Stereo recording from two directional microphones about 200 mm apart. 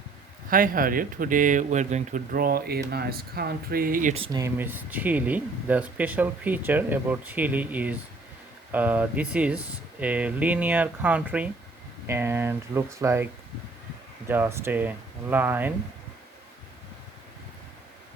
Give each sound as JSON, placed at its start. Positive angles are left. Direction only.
{"t": 0.5, "sound": "speech", "side_deg": -45}
{"t": 4.1, "sound": "speech", "side_deg": -25}
{"t": 14.3, "sound": "speech", "side_deg": -10}